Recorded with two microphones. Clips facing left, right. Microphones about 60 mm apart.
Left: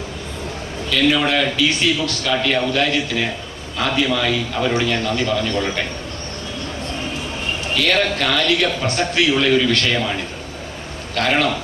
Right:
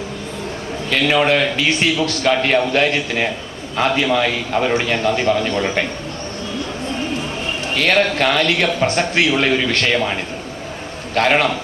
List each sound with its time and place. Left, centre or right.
0.9 s a man's voice: right
7.8 s a man's voice: right
11.1 s a man's voice: right